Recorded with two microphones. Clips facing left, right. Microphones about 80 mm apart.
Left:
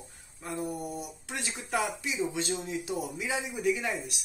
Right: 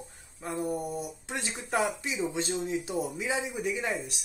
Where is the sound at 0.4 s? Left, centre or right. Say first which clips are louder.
Right 3 dB; right.